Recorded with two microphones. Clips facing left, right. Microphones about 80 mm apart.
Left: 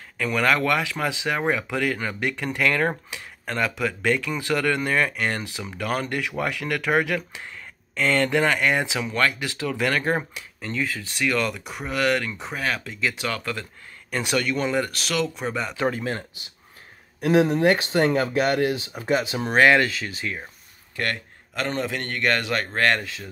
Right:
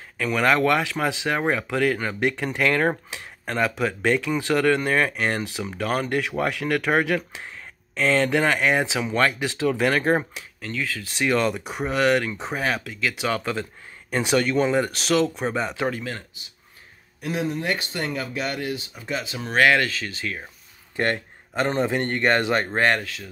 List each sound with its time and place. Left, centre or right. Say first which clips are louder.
0.2 s speech: right 2 dB; centre
10.6 s speech: left 2 dB; centre
11.1 s speech: right 3 dB; centre
15.9 s speech: left 2 dB; left
17.2 s speech: left 8 dB; left
17.6 s speech: left 8 dB; left
19.3 s speech: left 3 dB; left
19.6 s speech: left 1 dB; centre
20.9 s speech: right 4 dB; right
22.7 s speech: right 1 dB; centre